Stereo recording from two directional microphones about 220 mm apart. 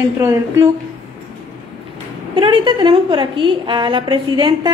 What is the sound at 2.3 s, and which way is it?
A woman's voice, 25° right (ahead or behind).